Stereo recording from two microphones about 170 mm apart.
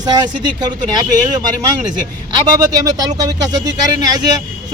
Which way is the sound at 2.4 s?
20° right (ahead or behind).